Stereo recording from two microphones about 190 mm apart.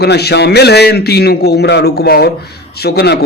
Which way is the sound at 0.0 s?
60° left (ahead or behind).